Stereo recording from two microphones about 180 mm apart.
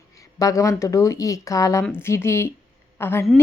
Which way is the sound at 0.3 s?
20° left (ahead or behind).